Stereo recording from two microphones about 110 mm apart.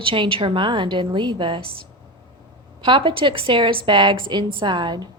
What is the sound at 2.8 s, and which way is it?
A woman's voice, 50° right (ahead or behind).